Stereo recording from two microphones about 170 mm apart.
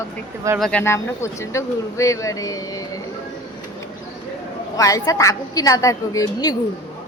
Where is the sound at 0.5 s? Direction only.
Centre (ahead or behind).